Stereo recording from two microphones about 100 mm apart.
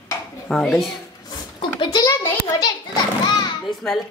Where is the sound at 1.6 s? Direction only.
55° left (ahead or behind).